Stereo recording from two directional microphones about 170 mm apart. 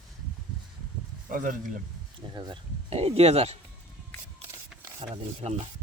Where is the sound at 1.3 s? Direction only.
55° right (ahead or behind).